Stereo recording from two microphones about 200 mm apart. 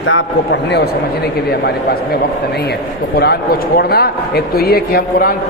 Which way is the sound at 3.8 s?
50° left (ahead or behind).